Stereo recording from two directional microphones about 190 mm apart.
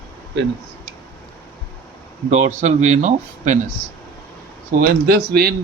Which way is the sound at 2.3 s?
40° right (ahead or behind).